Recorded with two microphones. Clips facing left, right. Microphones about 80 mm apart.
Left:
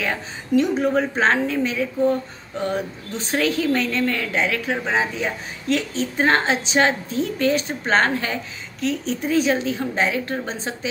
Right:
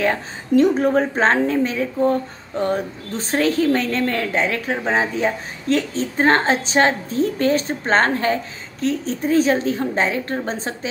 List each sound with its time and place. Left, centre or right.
0.0 s a woman's voice: right